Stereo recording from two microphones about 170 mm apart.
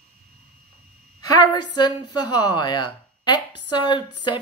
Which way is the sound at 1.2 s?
25° left (ahead or behind).